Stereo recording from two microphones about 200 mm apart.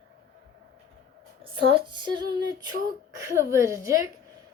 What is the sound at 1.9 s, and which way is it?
A child's voice, 20° right (ahead or behind).